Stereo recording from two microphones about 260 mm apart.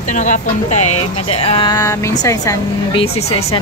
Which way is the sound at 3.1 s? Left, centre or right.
Left.